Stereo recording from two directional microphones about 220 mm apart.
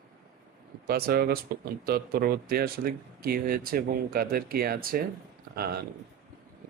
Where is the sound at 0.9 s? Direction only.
45° right (ahead or behind).